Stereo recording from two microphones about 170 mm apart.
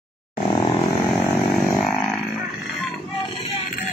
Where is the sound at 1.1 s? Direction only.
Centre (ahead or behind).